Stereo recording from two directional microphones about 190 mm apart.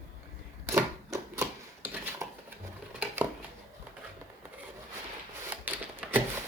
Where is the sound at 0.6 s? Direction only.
15° right (ahead or behind).